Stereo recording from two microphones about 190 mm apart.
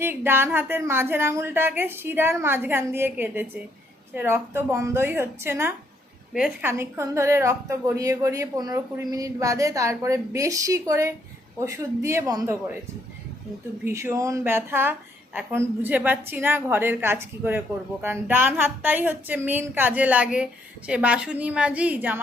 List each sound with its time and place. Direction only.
0.0 s a woman's voice: 10° right (ahead or behind)
13.8 s a woman's voice: 15° right (ahead or behind)